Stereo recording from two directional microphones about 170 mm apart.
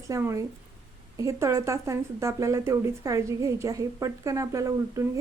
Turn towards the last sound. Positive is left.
turn(degrees=-20)  # may be behind; listen again after turning